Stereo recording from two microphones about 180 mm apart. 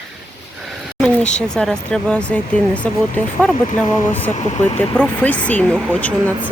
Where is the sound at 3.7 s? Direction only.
30° left (ahead or behind).